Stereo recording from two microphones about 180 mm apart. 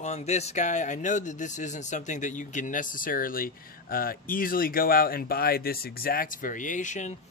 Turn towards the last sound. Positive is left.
turn(degrees=45)  # may be behind; listen again after turning